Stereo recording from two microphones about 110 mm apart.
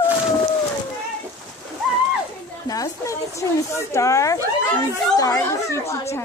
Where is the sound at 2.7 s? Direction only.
30° left (ahead or behind).